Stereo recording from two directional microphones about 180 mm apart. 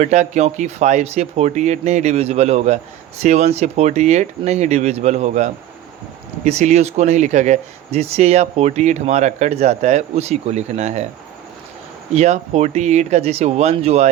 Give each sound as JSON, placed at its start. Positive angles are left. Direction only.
{"t": 0.0, "sound": "speech", "side_deg": -40}
{"t": 12.1, "sound": "speech", "side_deg": -35}